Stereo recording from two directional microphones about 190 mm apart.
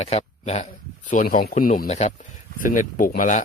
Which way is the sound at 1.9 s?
35° left (ahead or behind).